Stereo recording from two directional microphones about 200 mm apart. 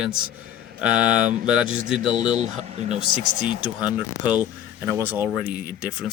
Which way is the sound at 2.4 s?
35° right (ahead or behind).